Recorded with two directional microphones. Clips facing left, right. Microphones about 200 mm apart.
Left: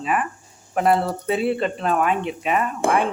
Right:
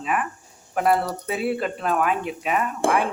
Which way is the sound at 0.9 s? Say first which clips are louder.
Left 3 dB; 25° left (ahead or behind).